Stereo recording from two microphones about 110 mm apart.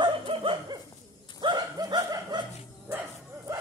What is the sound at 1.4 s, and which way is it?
Chuckle, 40° right (ahead or behind).